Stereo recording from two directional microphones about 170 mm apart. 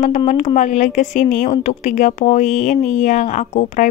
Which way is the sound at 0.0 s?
45° left (ahead or behind).